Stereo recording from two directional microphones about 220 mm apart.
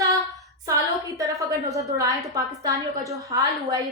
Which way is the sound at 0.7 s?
15° right (ahead or behind).